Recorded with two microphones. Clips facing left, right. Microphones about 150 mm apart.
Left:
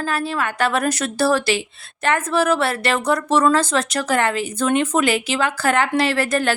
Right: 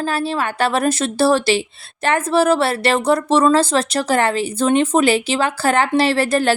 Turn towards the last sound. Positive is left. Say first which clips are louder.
# right 3 dB
turn(degrees=-30)  # may be behind; listen again after turning